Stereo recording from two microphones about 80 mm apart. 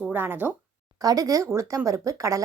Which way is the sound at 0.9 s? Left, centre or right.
Right.